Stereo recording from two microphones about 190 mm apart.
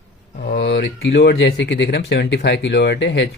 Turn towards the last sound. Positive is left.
turn(degrees=65)  # may be behind; listen again after turning